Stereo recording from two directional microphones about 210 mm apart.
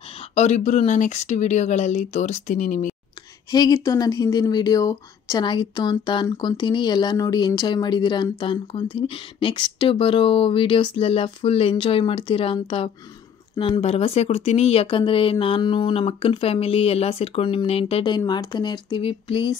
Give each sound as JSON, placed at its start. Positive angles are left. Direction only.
{"t": 0.3, "sound": "speech", "side_deg": 30}
{"t": 3.5, "sound": "speech", "side_deg": 20}